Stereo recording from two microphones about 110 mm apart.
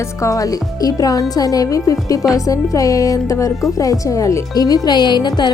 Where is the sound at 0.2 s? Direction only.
30° left (ahead or behind).